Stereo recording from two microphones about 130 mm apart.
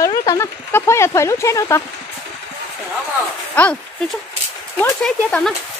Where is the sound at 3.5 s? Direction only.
10° left (ahead or behind).